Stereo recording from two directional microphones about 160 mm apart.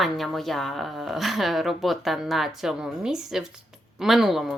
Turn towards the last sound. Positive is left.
turn(degrees=0)  # may be behind; listen again after turning